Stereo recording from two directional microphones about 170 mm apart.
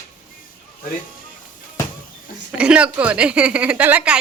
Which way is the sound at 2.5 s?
5° right (ahead or behind).